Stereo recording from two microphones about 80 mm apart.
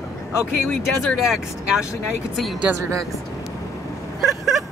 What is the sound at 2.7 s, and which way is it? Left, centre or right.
Speech, centre.